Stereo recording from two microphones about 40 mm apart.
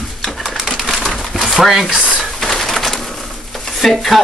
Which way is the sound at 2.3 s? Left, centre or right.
Centre.